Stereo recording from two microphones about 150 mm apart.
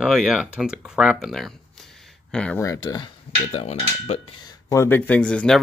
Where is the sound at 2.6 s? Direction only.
25° left (ahead or behind).